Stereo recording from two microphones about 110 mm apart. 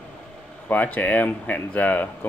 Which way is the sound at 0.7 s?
15° left (ahead or behind).